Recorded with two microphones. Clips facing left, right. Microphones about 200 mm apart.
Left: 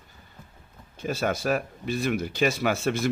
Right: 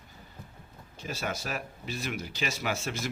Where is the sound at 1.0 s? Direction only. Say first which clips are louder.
Left 8 dB; 55° left (ahead or behind).